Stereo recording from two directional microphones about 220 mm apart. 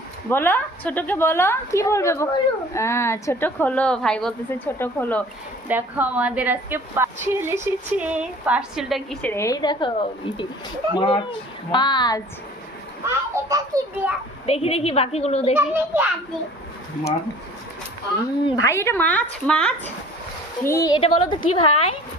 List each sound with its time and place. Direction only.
0.3 s a woman's voice: 10° left (ahead or behind)
5.6 s a woman's voice: 10° right (ahead or behind); by 12.2 s 20° left (ahead or behind)
13.1 s a child's voice: 15° right (ahead or behind)
14.4 s a woman's voice: 25° left (ahead or behind)
15.5 s a woman's voice: 10° right (ahead or behind)
18.4 s a woman's voice: 15° left (ahead or behind)